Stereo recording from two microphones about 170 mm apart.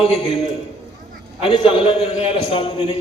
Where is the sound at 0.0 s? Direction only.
35° left (ahead or behind).